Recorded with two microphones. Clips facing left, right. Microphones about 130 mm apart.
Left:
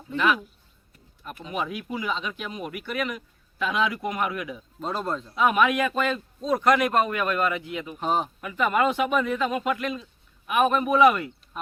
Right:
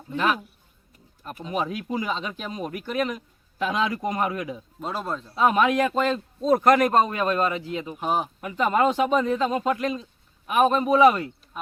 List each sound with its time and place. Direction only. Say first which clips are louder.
1.5 s speech: right 3 dB; 35° right (ahead or behind)
4.8 s speech: left 2 dB; 5° right (ahead or behind)
5.3 s speech: right 2 dB; 30° right (ahead or behind)
6.4 s speech: right 3 dB; 45° right (ahead or behind)
7.9 s speech: left 1 dB; 5° right (ahead or behind)
8.4 s speech: right 2 dB; 30° right (ahead or behind)